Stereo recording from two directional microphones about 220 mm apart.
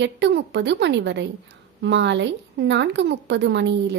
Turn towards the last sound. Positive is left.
turn(degrees=-55)  # may be behind; listen again after turning